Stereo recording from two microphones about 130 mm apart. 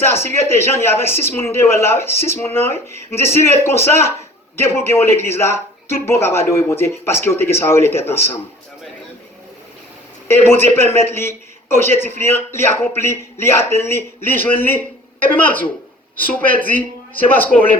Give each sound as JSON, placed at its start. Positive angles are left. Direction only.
{"t": 0.0, "sound": "a man's voice", "side_deg": 20}
{"t": 10.2, "sound": "a man's voice", "side_deg": 20}